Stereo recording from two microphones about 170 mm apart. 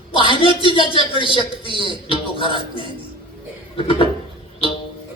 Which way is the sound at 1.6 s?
30° right (ahead or behind).